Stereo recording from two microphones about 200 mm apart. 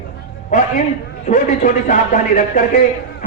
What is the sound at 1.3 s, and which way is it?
A man's voice, 40° left (ahead or behind).